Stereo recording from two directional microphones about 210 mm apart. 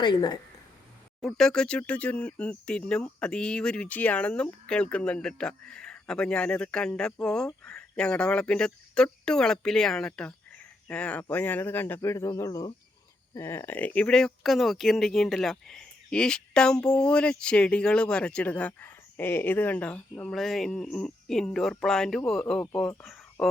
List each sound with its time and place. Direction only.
0.0 s a woman's voice: 20° left (ahead or behind)
1.2 s speech: centre (ahead or behind)